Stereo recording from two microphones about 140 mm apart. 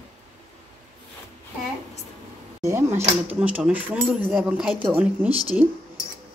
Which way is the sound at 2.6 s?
15° right (ahead or behind).